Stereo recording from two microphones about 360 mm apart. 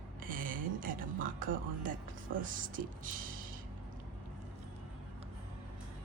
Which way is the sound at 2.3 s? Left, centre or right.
Right.